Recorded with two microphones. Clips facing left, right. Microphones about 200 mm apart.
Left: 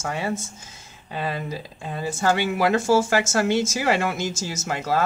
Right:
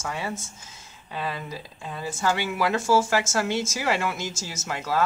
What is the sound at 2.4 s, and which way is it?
Speech, 25° left (ahead or behind).